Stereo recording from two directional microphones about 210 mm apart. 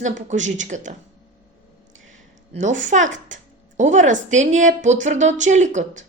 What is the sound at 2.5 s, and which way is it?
A woman's voice, 35° right (ahead or behind).